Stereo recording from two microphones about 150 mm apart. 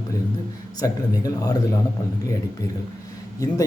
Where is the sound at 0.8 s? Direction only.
25° left (ahead or behind).